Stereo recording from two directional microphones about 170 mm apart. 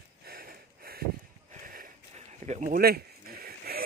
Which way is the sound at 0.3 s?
60° right (ahead or behind).